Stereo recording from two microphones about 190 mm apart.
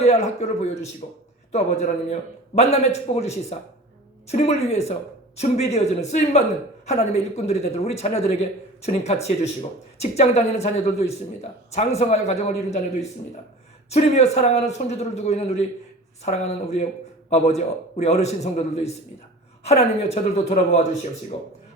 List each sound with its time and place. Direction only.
0.0 s a man's voice: 35° left (ahead or behind)